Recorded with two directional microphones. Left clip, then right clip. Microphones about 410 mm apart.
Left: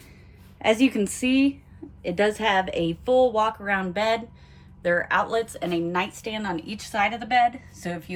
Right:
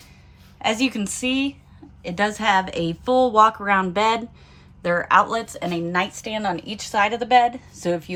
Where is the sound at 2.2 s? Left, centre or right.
Centre.